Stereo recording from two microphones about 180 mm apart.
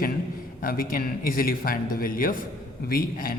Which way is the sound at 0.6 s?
50° left (ahead or behind).